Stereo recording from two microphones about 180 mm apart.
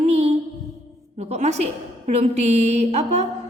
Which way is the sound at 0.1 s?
35° right (ahead or behind).